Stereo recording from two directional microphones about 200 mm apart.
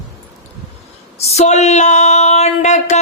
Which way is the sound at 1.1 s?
35° left (ahead or behind).